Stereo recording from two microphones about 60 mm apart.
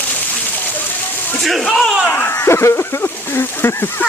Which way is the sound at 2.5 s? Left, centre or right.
Left.